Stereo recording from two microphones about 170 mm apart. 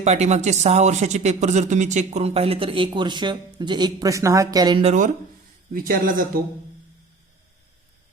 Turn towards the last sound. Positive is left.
turn(degrees=-55)  # may be behind; listen again after turning